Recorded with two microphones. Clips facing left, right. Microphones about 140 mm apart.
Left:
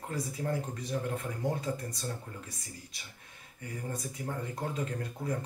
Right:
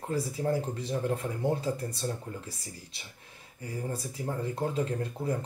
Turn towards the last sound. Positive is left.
turn(degrees=-30)  # may be behind; listen again after turning